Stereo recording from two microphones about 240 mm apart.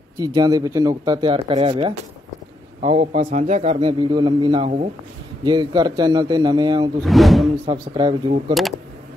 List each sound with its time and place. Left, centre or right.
0.2 s a man's voice: centre
7.0 s speech: centre
7.7 s a man's voice: centre